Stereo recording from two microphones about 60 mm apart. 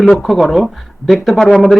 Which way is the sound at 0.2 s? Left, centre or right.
Centre.